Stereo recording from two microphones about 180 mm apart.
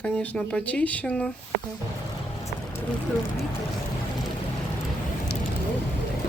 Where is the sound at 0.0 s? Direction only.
5° left (ahead or behind).